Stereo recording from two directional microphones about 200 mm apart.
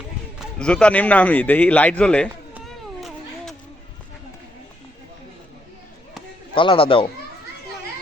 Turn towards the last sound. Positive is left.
turn(degrees=25)  # may be behind; listen again after turning